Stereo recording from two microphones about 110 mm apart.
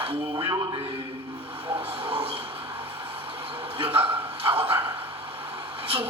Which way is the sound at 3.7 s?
55° right (ahead or behind).